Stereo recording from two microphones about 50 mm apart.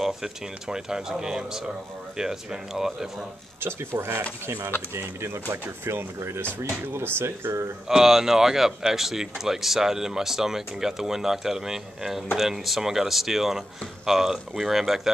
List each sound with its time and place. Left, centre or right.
0.0 s speech: centre
3.6 s speech: right
7.9 s speech: centre